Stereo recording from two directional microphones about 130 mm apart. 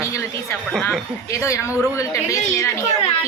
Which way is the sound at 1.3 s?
25° left (ahead or behind).